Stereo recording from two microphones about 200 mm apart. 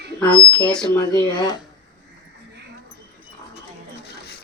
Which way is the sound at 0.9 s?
15° left (ahead or behind).